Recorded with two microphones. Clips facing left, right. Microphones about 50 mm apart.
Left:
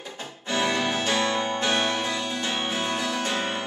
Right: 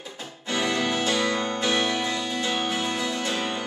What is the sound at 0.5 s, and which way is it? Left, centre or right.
Music, left.